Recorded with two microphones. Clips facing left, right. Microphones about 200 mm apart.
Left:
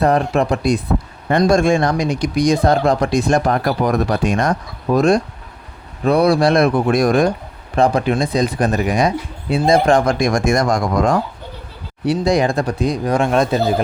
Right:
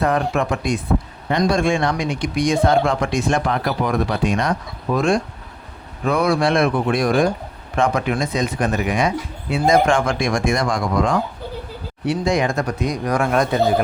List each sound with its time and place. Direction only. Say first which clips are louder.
0.0 s speech: left 4 dB; 35° left (ahead or behind)
1.3 s speech: left 4 dB; 45° left (ahead or behind); by 13.8 s 25° left (ahead or behind)